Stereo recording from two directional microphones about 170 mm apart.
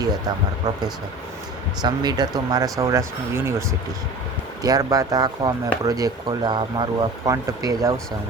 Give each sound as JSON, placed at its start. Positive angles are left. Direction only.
{"t": 1.8, "sound": "speech", "side_deg": -25}